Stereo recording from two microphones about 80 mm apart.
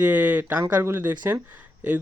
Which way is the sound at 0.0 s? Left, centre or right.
Right.